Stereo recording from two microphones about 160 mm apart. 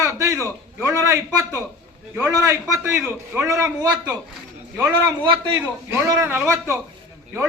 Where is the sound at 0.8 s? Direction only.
15° right (ahead or behind).